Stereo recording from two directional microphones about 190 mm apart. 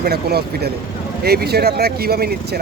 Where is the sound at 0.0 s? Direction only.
55° right (ahead or behind).